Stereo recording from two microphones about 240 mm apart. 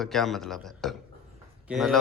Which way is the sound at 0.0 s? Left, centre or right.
Centre.